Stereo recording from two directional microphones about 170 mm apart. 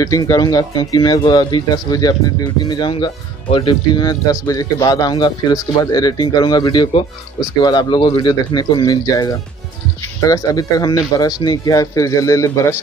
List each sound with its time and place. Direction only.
0.0 s speech: 20° left (ahead or behind)